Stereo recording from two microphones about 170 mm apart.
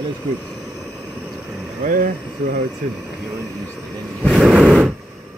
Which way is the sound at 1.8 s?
55° right (ahead or behind).